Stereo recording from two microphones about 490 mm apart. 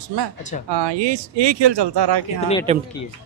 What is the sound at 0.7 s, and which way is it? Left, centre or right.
Speech, right.